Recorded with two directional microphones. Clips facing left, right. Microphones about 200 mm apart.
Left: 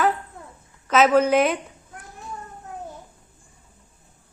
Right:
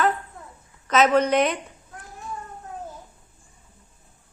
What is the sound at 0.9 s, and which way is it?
Speech, 5° left (ahead or behind).